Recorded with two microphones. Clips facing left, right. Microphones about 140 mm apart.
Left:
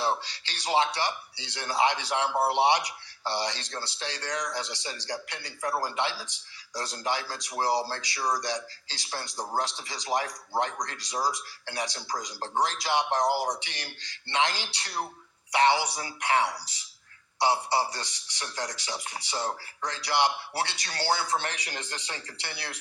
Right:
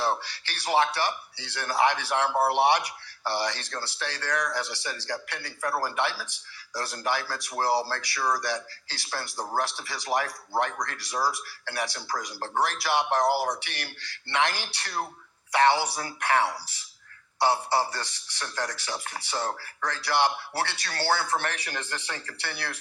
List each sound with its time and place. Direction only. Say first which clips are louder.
0.0 s speech: right 1 dB; 20° left (ahead or behind)